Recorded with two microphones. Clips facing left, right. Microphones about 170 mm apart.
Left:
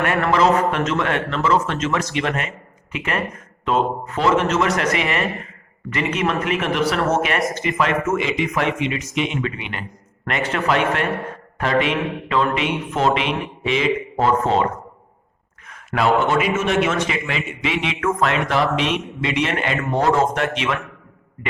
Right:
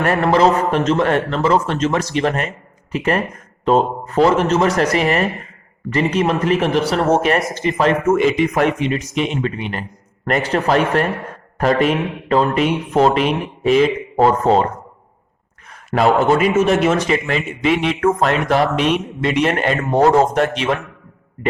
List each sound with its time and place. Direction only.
0.0 s a man's voice: 35° right (ahead or behind)
7.3 s speech: centre (ahead or behind)
7.8 s a man's voice: 35° right (ahead or behind)